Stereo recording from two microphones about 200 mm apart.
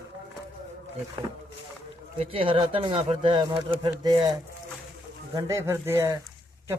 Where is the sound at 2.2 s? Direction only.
25° right (ahead or behind).